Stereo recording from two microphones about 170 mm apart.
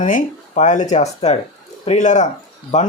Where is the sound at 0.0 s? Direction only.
50° left (ahead or behind).